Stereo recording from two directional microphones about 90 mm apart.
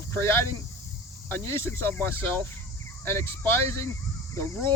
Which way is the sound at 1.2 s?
25° left (ahead or behind).